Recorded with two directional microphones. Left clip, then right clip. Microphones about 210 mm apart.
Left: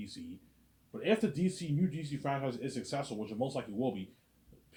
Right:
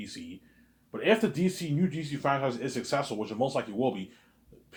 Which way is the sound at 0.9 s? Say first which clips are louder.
Right 6 dB; 25° right (ahead or behind).